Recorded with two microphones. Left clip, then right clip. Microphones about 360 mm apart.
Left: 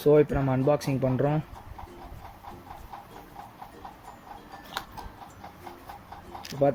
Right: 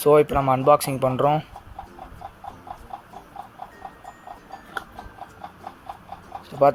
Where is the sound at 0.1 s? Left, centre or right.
Right.